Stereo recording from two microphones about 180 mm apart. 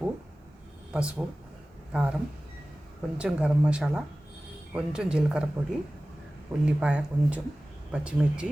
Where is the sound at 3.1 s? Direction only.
5° right (ahead or behind).